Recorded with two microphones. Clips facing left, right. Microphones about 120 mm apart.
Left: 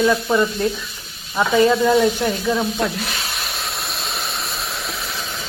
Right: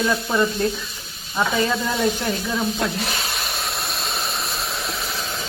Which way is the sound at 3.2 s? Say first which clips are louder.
Even; centre (ahead or behind).